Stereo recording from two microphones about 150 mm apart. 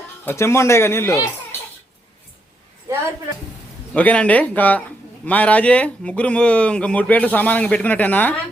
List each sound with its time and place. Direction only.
0.3 s speech: 20° left (ahead or behind)
3.9 s speech: 10° left (ahead or behind)